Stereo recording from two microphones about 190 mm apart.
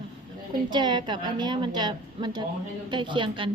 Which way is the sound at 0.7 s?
25° right (ahead or behind).